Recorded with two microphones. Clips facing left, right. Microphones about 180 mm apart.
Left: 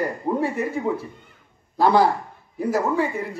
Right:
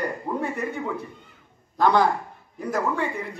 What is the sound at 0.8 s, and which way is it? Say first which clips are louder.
A man's voice: left 5 dB; 35° left (ahead or behind).